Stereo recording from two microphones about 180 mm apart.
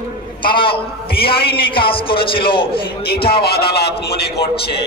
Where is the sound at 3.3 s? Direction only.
60° left (ahead or behind).